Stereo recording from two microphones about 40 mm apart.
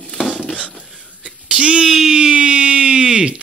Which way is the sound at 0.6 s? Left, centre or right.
Right.